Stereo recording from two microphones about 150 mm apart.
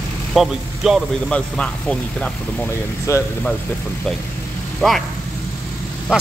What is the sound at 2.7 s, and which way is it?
Speech, 20° left (ahead or behind).